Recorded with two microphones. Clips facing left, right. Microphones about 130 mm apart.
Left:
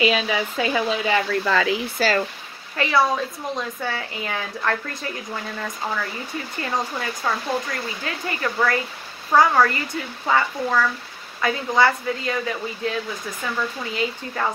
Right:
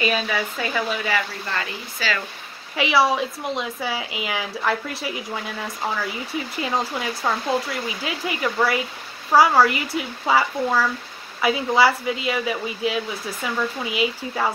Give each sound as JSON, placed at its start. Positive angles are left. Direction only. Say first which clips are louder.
{"t": 0.0, "sound": "speech", "louder": "left 2 dB", "side_deg": 15}
{"t": 2.0, "sound": "speech", "louder": "left 4 dB", "side_deg": 45}
{"t": 2.7, "sound": "speech", "louder": "right 1 dB", "side_deg": -5}
{"t": 6.6, "sound": "speech", "louder": "right 1 dB", "side_deg": -15}